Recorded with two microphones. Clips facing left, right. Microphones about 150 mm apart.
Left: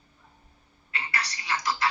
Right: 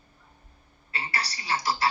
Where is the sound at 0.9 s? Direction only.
30° right (ahead or behind).